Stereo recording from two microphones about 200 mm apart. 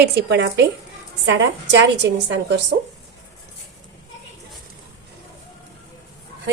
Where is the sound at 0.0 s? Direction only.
60° right (ahead or behind).